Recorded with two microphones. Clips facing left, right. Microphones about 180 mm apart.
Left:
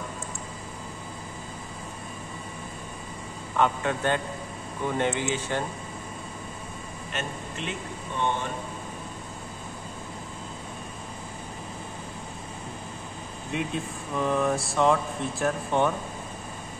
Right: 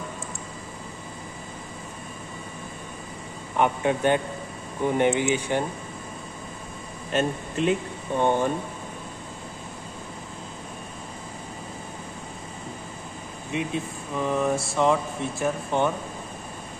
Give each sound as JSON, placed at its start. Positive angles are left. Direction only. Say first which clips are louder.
{"t": 3.5, "sound": "speech", "louder": "right 2 dB", "side_deg": -15}
{"t": 7.1, "sound": "speech", "louder": "right 10 dB", "side_deg": -40}
{"t": 13.5, "sound": "speech", "louder": "right 2 dB", "side_deg": 0}